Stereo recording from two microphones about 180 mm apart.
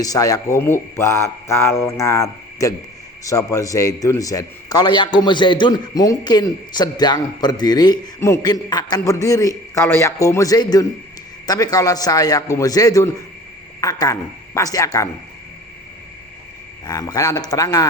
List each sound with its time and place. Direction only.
0.0 s a man's voice: 20° left (ahead or behind)
16.8 s a man's voice: 20° left (ahead or behind)